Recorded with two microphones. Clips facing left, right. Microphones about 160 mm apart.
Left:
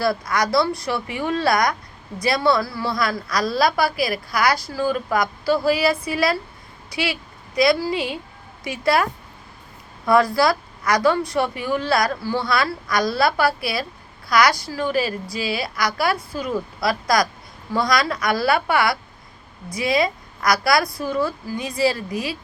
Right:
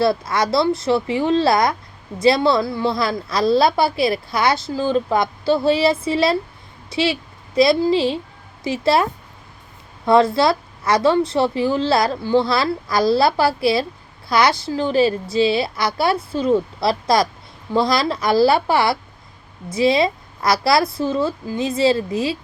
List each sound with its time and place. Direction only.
0.0 s a woman's voice: 25° right (ahead or behind)
10.1 s a woman's voice: 25° right (ahead or behind)